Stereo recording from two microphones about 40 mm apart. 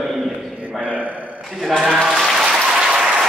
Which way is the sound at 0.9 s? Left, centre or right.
Right.